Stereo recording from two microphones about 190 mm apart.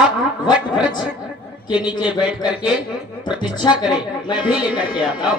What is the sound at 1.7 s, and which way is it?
Speech, 5° right (ahead or behind).